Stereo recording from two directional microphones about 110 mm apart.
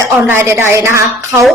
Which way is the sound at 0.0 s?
20° right (ahead or behind).